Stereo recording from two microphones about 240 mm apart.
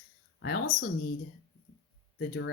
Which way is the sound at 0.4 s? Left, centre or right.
Left.